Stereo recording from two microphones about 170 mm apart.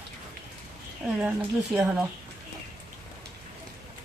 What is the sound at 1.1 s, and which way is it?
Speech, 5° right (ahead or behind).